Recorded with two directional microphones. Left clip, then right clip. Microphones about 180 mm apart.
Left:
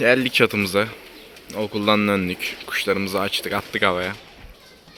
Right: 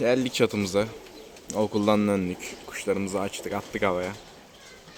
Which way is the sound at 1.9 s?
Centre (ahead or behind).